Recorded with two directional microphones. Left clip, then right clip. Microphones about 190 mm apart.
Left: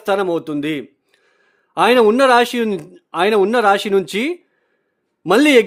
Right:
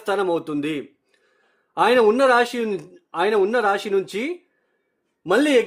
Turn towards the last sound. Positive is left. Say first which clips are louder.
# left 6 dB
turn(degrees=50)  # may be behind; listen again after turning